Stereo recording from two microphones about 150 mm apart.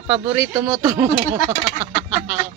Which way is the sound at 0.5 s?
30° right (ahead or behind).